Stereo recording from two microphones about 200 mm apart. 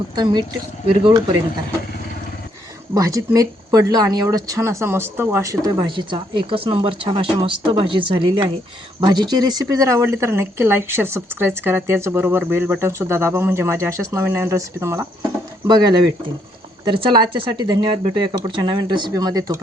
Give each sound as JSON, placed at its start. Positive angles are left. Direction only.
{"t": 1.0, "sound": "speech", "side_deg": -20}
{"t": 2.9, "sound": "a woman's voice", "side_deg": -15}